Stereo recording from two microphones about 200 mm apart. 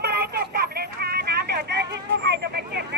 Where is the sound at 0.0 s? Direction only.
55° right (ahead or behind).